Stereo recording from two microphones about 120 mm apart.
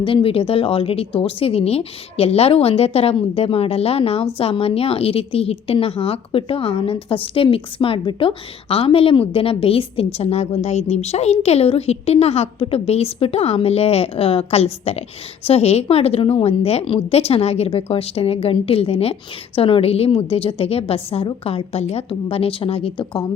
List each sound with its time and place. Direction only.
0.0 s a woman's voice: 45° left (ahead or behind)